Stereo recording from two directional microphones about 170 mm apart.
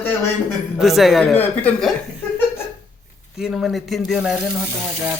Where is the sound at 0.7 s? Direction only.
Centre (ahead or behind).